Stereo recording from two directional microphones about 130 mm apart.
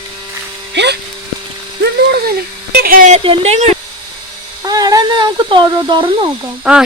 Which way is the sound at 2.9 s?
90° right.